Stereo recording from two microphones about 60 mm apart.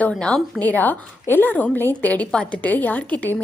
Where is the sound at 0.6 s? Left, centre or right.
Left.